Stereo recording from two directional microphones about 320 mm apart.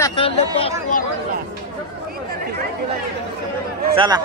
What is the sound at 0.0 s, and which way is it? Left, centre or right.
Chatter, centre.